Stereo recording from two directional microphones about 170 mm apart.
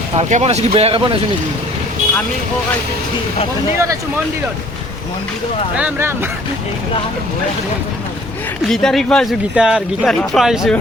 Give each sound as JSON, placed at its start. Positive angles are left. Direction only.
{"t": 0.2, "sound": "speech", "side_deg": -40}
{"t": 5.7, "sound": "speech", "side_deg": -10}
{"t": 8.7, "sound": "speech", "side_deg": 0}